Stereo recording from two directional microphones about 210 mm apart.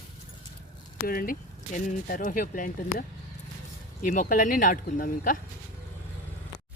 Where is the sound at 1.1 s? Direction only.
45° left (ahead or behind).